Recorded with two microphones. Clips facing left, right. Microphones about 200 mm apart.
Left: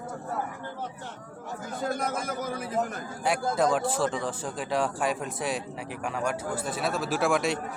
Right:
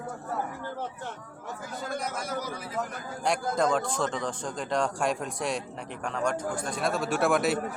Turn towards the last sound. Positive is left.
turn(degrees=0)  # may be behind; listen again after turning